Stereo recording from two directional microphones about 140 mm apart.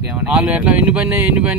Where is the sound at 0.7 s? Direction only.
10° right (ahead or behind).